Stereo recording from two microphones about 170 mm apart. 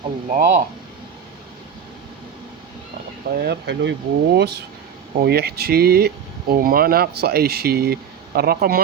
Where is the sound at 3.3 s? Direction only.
75° right (ahead or behind).